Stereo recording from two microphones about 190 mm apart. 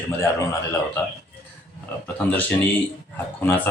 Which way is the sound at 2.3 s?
10° left (ahead or behind).